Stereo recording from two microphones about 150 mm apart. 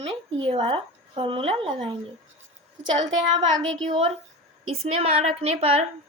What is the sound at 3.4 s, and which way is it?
A woman's voice, 35° right (ahead or behind).